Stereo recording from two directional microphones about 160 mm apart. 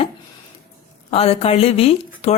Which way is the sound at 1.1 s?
40° left (ahead or behind).